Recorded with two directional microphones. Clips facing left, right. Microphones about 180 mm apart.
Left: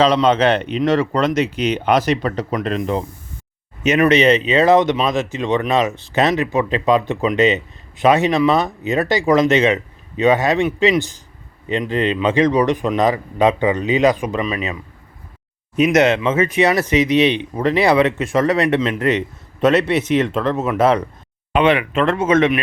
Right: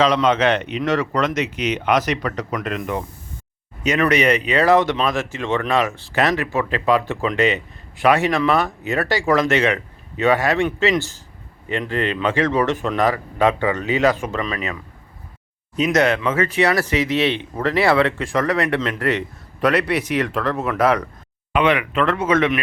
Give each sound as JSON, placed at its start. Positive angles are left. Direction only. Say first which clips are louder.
{"t": 0.0, "sound": "a man's voice", "louder": "left 3 dB", "side_deg": 30}